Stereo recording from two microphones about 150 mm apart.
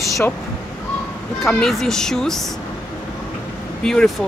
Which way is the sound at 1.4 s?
5° left (ahead or behind).